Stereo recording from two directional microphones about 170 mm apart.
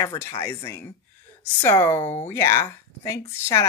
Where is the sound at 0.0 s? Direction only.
20° left (ahead or behind).